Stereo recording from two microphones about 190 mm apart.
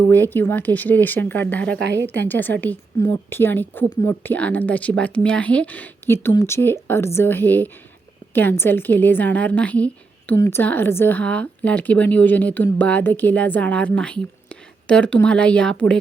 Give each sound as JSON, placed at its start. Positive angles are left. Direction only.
{"t": 0.0, "sound": "a woman's voice", "side_deg": 10}
{"t": 1.8, "sound": "a woman's voice", "side_deg": -70}
{"t": 2.1, "sound": "a woman's voice", "side_deg": 10}